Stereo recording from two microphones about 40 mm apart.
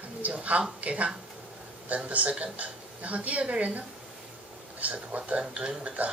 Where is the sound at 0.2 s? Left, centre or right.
Right.